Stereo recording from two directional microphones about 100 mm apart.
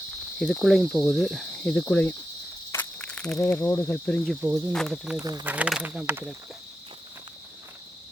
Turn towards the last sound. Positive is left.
turn(degrees=-10)  # may be behind; listen again after turning